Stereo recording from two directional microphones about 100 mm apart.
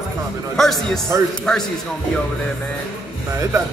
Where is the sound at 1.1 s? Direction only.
30° right (ahead or behind).